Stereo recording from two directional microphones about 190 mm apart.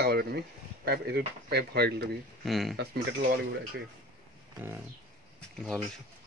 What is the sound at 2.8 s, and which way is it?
Speech, 55° right (ahead or behind).